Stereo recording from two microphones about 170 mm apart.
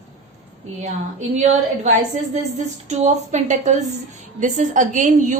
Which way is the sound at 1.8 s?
45° right (ahead or behind).